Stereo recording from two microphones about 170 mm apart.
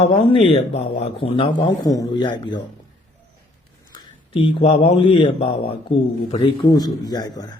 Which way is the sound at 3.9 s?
30° left (ahead or behind).